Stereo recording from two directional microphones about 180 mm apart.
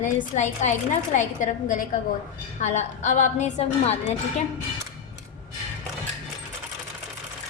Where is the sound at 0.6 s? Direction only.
40° left (ahead or behind).